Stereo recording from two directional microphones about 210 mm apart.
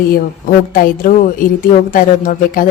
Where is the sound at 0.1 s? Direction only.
40° left (ahead or behind).